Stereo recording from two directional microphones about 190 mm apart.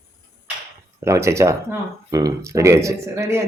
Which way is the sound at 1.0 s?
15° right (ahead or behind).